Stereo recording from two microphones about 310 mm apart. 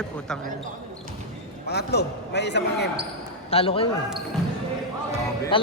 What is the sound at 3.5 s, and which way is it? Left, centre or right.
Speech, centre.